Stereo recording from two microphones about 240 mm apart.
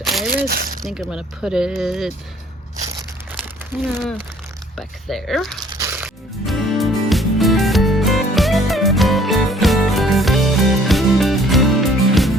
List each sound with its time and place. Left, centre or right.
0.0 s a sound: centre
0.4 s speech: right
0.9 s speech: centre
3.7 s speech: centre
5.7 s music: centre